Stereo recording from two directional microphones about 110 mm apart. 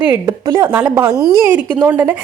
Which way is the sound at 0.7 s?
15° right (ahead or behind).